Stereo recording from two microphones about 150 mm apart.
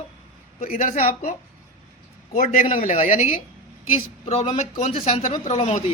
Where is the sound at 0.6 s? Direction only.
65° left (ahead or behind).